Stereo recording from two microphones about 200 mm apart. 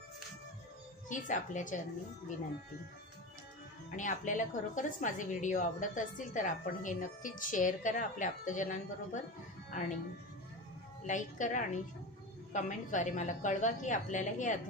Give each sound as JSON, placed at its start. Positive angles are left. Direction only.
{"t": 1.0, "sound": "a woman's voice", "side_deg": 40}
{"t": 3.9, "sound": "a woman's voice", "side_deg": 40}
{"t": 9.7, "sound": "music", "side_deg": 40}
{"t": 11.1, "sound": "a woman's voice", "side_deg": 40}